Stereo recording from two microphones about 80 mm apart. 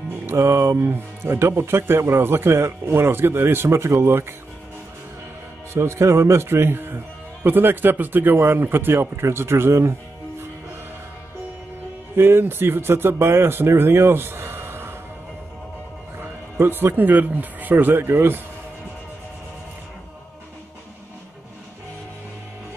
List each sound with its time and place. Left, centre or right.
0.3 s speech: right
5.7 s a man's voice: right
12.2 s speech: right
16.2 s speech: right